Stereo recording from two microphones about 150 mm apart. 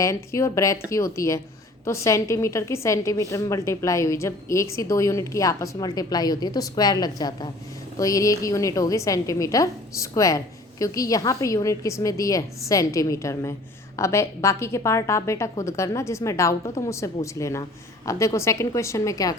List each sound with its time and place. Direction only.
0.0 s a woman's voice: 20° left (ahead or behind)